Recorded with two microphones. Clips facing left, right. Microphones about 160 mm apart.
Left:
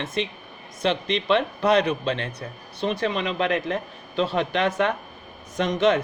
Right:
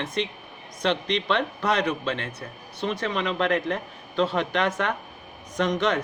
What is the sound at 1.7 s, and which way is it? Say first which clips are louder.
Speech: left 4 dB; 30° left (ahead or behind).